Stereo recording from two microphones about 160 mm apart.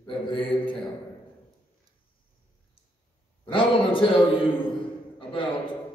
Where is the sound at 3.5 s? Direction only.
35° left (ahead or behind).